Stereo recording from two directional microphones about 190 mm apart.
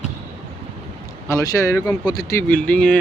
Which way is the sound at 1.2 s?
15° left (ahead or behind).